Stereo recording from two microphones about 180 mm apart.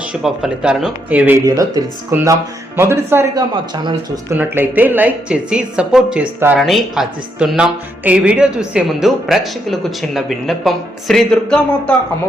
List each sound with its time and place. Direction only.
0.1 s speech: 5° right (ahead or behind)